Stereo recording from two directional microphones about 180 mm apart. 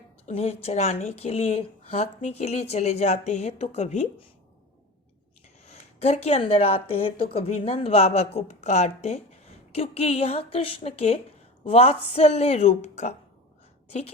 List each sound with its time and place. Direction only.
0.3 s a woman's voice: 35° left (ahead or behind)
5.6 s a woman's voice: 35° left (ahead or behind)